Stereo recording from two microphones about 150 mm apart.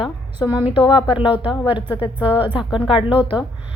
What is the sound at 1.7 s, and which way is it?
Speech, 10° right (ahead or behind).